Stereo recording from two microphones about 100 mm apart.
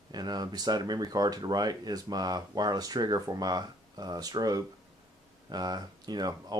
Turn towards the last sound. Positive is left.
turn(degrees=-40)  # may be behind; listen again after turning